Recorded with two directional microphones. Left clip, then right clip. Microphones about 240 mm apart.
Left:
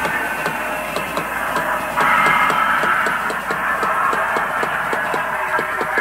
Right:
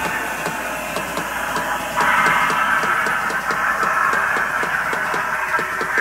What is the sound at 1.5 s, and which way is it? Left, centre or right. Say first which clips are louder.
Music: left 2 dB; centre.